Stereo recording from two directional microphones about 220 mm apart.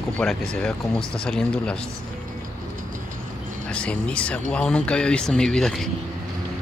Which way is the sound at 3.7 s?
5° left (ahead or behind).